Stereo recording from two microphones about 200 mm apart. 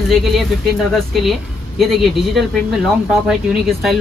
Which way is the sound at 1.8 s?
Centre (ahead or behind).